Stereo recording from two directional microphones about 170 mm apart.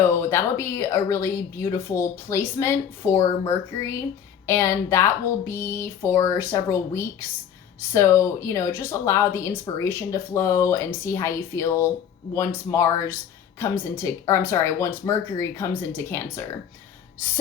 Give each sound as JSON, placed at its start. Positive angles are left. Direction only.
{"t": 0.1, "sound": "speech", "side_deg": 15}